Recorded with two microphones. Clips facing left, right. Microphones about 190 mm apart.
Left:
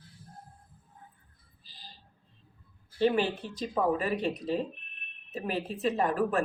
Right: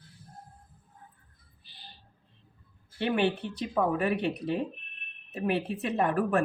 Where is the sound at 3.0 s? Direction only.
65° right (ahead or behind).